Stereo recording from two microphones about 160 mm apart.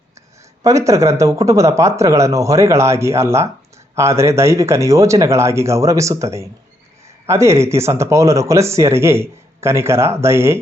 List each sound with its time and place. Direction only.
0.6 s a man's voice: 20° right (ahead or behind)